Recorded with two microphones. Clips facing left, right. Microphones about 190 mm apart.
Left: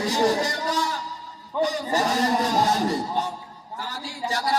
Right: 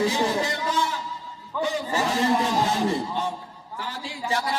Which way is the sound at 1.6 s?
40° left (ahead or behind).